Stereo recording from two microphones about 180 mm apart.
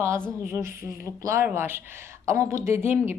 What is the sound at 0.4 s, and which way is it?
Speech, 15° right (ahead or behind).